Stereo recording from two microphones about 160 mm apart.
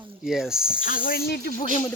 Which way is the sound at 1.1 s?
75° left (ahead or behind).